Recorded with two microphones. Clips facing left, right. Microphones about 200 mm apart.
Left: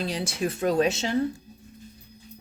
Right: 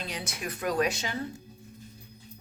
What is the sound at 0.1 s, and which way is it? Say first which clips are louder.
Speech: left 8 dB; 30° left (ahead or behind).